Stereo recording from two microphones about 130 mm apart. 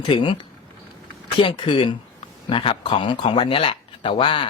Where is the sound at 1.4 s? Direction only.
40° left (ahead or behind).